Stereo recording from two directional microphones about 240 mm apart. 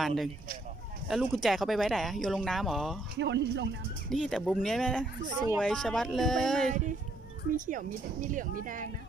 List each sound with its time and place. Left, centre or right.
0.0 s speech: centre
3.2 s speech: right
4.1 s speech: centre
7.5 s speech: right